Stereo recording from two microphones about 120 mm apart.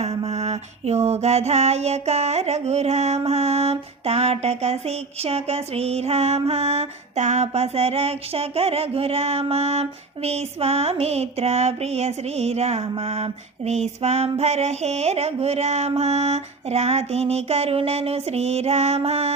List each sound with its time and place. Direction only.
0.0 s mantra: 60° right (ahead or behind)